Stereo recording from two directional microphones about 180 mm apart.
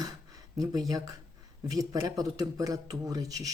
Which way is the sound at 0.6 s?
20° right (ahead or behind).